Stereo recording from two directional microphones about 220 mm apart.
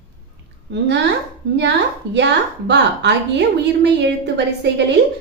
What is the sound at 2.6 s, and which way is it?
A woman's voice, 50° right (ahead or behind).